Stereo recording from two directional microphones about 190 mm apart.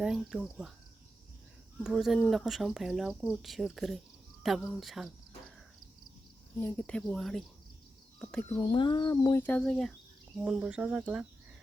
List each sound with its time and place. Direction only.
0.0 s speech: centre (ahead or behind)
1.8 s speech: 5° right (ahead or behind)
6.6 s speech: 10° left (ahead or behind)
8.6 s speech: 25° left (ahead or behind)
9.4 s speech: 5° left (ahead or behind)